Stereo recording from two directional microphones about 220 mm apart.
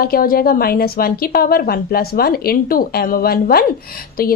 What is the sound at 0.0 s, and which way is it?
A woman's voice, 40° left (ahead or behind).